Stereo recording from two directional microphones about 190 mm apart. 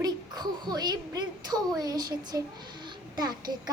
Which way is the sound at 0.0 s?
20° right (ahead or behind).